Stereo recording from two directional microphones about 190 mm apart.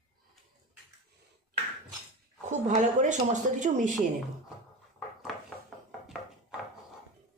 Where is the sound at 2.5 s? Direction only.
40° right (ahead or behind).